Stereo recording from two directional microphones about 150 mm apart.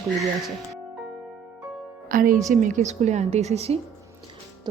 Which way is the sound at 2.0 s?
65° right (ahead or behind).